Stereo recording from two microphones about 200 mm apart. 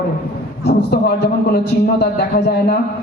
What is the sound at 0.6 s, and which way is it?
A man's voice, 55° left (ahead or behind).